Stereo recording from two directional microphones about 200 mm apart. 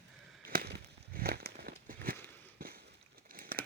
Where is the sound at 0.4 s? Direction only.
50° right (ahead or behind).